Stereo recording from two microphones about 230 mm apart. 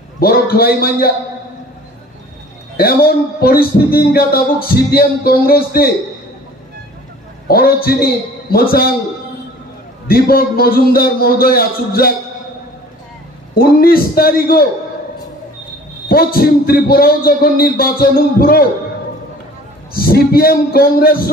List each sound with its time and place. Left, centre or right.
0.2 s speech: left
2.8 s speech: left
7.4 s speech: left
10.0 s speech: left
13.6 s speech: left
16.1 s speech: left
19.9 s speech: left